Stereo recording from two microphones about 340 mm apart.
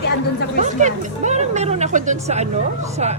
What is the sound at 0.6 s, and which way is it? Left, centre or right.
Speech, right.